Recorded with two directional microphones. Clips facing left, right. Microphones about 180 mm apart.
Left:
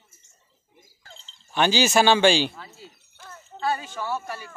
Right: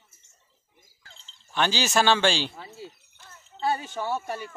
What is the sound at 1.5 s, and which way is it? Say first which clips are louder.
Speech: left 4 dB; 10° left (ahead or behind).